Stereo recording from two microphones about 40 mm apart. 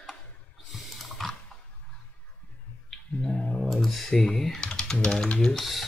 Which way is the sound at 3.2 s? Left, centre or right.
Left.